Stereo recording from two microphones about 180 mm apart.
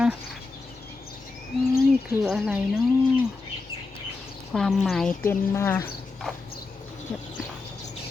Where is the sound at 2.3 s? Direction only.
5° right (ahead or behind).